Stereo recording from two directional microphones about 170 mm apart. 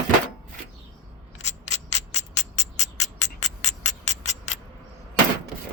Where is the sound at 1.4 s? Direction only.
40° left (ahead or behind).